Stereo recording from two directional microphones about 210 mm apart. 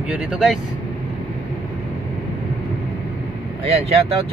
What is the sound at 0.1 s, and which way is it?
Speech, 5° right (ahead or behind).